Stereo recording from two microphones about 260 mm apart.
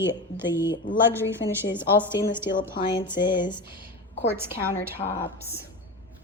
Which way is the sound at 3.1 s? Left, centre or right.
Centre.